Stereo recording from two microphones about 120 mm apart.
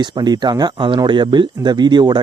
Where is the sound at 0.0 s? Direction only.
35° right (ahead or behind).